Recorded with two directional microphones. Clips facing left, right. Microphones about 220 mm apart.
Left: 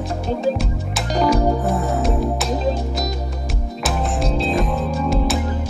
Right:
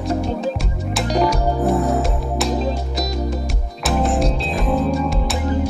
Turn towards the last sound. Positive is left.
turn(degrees=0)  # may be behind; listen again after turning